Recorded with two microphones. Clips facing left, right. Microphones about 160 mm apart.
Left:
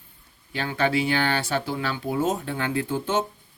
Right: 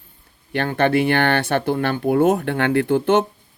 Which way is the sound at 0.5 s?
60° right (ahead or behind).